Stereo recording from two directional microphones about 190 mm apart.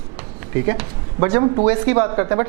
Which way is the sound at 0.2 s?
15° right (ahead or behind).